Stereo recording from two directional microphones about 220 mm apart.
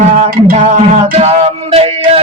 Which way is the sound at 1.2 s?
25° right (ahead or behind).